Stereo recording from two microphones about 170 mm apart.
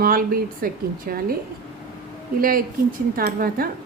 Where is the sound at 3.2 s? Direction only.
60° right (ahead or behind).